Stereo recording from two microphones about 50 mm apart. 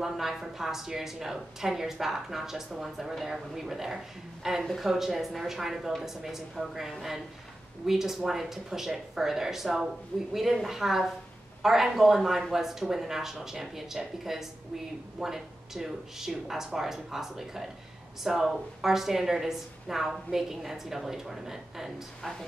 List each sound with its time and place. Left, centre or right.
0.0 s a woman's voice: centre